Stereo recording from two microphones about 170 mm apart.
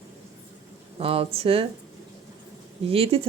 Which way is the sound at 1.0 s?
35° right (ahead or behind).